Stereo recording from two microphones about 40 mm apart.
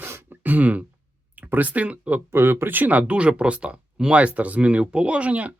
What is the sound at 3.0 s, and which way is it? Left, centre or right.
Speech, right.